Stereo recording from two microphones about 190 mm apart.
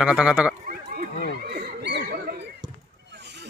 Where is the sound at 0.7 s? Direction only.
55° right (ahead or behind).